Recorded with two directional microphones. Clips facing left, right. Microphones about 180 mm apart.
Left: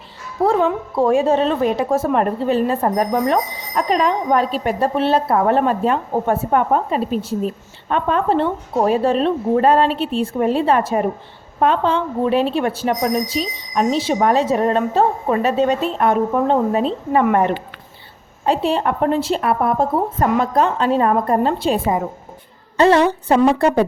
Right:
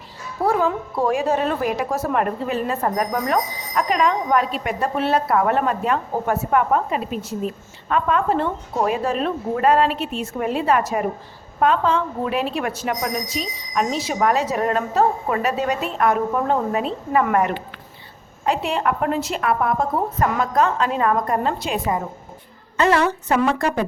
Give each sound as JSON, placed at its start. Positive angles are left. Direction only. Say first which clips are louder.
{"t": 0.4, "sound": "a woman's voice", "louder": "left 3 dB", "side_deg": 25}